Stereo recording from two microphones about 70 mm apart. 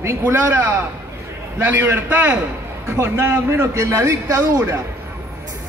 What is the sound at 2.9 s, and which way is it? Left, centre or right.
A man's voice, right.